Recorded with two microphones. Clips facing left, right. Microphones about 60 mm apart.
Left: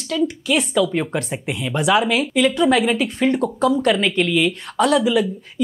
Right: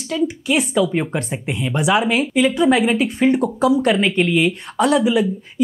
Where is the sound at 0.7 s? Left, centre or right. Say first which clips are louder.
Right 1 dB; centre.